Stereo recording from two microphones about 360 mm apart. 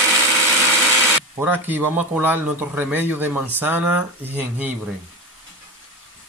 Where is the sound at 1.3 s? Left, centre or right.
Centre.